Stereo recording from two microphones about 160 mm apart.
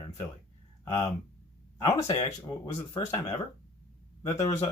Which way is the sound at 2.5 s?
20° left (ahead or behind).